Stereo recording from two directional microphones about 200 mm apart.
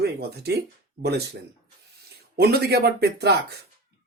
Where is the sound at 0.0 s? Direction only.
55° right (ahead or behind).